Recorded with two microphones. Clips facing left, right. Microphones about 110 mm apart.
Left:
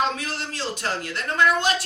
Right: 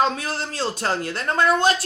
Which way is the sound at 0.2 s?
35° right (ahead or behind).